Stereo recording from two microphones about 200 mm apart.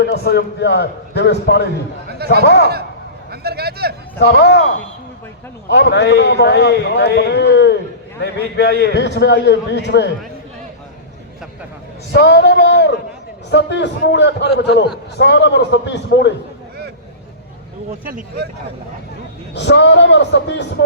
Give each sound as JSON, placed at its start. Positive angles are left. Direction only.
{"t": 0.0, "sound": "a man's voice", "side_deg": 55}
{"t": 2.0, "sound": "a sound", "side_deg": -50}
{"t": 3.4, "sound": "a sound", "side_deg": -50}
{"t": 4.2, "sound": "a man's voice", "side_deg": 60}
{"t": 5.7, "sound": "a man's voice", "side_deg": 55}
{"t": 12.1, "sound": "a man's voice", "side_deg": 60}
{"t": 18.0, "sound": "speech", "side_deg": -45}
{"t": 19.5, "sound": "a man's voice", "side_deg": 60}